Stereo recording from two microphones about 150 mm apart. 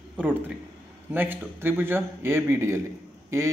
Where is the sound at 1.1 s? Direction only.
10° right (ahead or behind).